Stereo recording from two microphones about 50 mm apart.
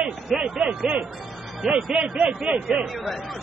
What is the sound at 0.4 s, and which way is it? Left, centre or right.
Speech, right.